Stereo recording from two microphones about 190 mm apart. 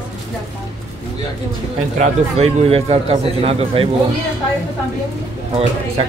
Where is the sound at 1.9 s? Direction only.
35° right (ahead or behind).